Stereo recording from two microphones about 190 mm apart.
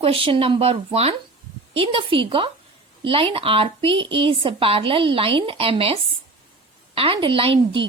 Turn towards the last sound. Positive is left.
turn(degrees=-30)  # may be behind; listen again after turning